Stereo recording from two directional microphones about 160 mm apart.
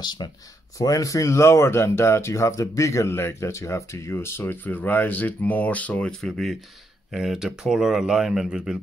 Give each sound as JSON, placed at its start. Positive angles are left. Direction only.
{"t": 0.0, "sound": "speech", "side_deg": 25}